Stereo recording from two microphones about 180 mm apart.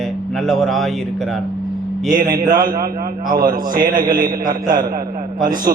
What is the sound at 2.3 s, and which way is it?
A man's voice, 55° right (ahead or behind).